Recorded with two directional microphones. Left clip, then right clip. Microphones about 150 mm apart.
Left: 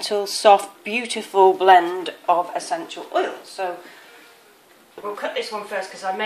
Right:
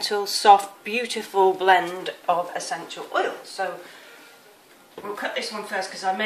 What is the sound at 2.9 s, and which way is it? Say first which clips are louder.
Speech: even; 45° left (ahead or behind).